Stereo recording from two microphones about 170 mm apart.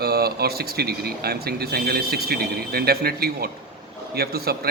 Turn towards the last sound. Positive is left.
turn(degrees=-65)  # may be behind; listen again after turning